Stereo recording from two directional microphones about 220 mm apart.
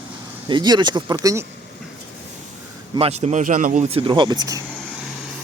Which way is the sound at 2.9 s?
30° right (ahead or behind).